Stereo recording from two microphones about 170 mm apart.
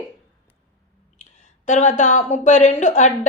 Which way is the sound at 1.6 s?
50° left (ahead or behind).